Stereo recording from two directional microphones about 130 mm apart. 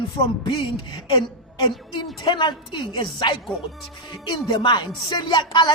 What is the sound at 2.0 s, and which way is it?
Speech, 35° left (ahead or behind).